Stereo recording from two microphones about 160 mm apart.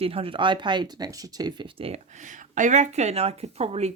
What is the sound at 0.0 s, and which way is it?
Speech, 35° right (ahead or behind).